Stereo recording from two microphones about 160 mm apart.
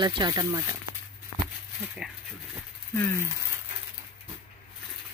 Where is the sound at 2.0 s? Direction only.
5° right (ahead or behind).